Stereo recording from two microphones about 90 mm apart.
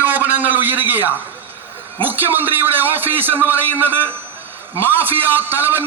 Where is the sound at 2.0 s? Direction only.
20° right (ahead or behind).